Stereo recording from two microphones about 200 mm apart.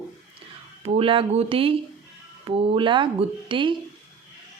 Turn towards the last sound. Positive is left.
turn(degrees=-25)  # may be behind; listen again after turning